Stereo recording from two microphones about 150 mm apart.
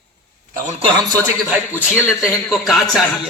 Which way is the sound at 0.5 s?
55° right (ahead or behind).